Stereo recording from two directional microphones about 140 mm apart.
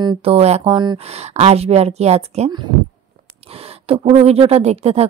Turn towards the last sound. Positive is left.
turn(degrees=-50)  # may be behind; listen again after turning